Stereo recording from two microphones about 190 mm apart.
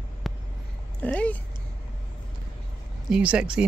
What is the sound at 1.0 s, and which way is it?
Speech, 10° left (ahead or behind).